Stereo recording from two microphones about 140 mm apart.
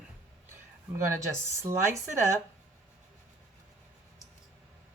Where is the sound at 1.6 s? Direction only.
20° right (ahead or behind).